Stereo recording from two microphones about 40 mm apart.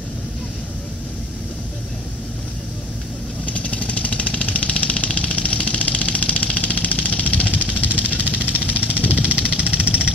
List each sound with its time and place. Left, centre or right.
3.6 s vehicle: left
8.3 s vehicle: right